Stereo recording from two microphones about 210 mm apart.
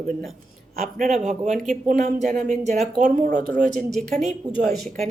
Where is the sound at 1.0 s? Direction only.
35° right (ahead or behind).